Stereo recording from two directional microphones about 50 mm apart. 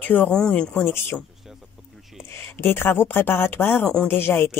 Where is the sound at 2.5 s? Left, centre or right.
Left.